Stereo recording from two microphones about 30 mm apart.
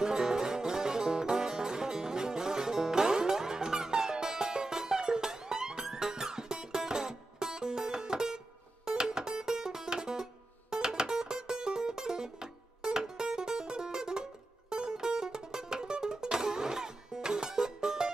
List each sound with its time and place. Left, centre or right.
0.0 s music: right